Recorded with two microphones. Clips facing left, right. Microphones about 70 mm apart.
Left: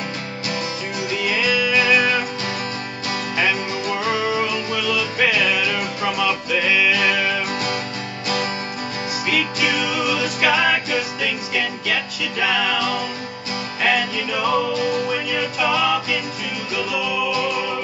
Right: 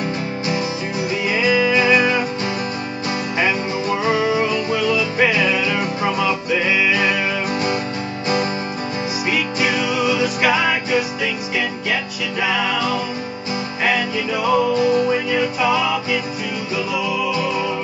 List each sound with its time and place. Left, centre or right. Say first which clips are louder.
1.1 s music: right 3 dB; right
3.3 s music: right 1 dB; right
9.3 s music: right 1 dB; right